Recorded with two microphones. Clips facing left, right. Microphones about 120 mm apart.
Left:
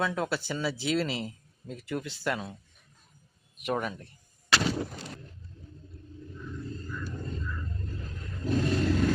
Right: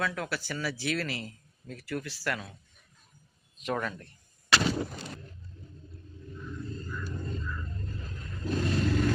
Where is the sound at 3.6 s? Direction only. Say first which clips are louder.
Left 1 dB; 15° left (ahead or behind).